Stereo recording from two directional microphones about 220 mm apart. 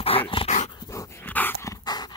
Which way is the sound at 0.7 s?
15° left (ahead or behind).